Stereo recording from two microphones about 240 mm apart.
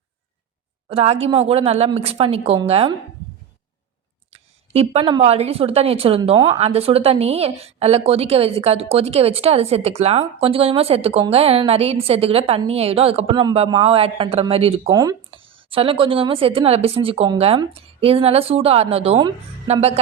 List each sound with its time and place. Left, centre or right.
0.9 s a woman's voice: right
4.3 s a woman's voice: right